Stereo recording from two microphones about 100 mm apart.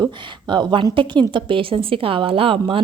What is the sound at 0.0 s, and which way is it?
Speech, 50° right (ahead or behind).